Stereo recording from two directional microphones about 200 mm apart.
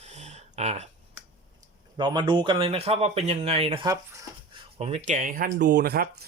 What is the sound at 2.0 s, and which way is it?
Speech, 20° right (ahead or behind).